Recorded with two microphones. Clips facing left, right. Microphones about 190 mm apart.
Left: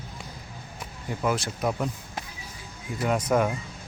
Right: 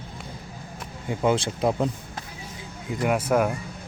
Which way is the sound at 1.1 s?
25° right (ahead or behind).